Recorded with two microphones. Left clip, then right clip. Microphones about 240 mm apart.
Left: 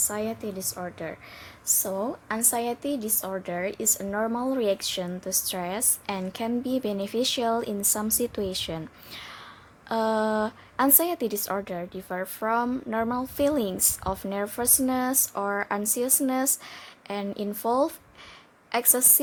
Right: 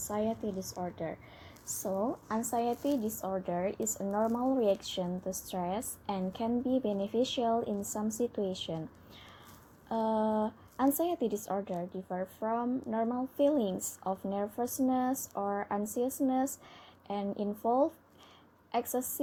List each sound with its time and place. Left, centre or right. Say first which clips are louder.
0.1 s a woman's voice: left 3 dB; centre
0.6 s a woman's voice: left 5 dB; left
0.9 s a woman's voice: left 3 dB; centre
1.8 s a woman's voice: right 1 dB; left
4.1 s a woman's voice: left 1 dB; left
4.7 s a woman's voice: left 5 dB; left